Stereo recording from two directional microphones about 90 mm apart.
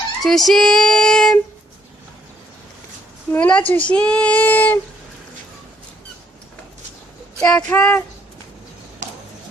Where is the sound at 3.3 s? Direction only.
15° left (ahead or behind).